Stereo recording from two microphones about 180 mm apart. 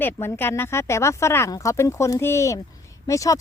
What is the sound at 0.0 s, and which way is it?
Speech, 10° left (ahead or behind).